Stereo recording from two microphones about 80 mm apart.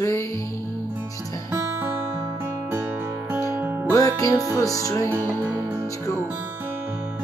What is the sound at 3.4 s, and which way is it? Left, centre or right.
Music, right.